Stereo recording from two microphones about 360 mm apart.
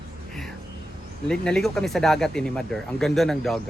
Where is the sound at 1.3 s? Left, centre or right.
Centre.